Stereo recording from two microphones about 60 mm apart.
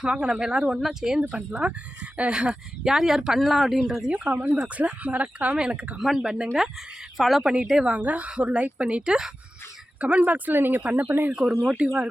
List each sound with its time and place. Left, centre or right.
0.0 s speech: centre
1.3 s speech: centre
4.1 s speech: right
6.0 s a woman's voice: centre
7.4 s speech: centre
10.0 s speech: right
11.3 s speech: centre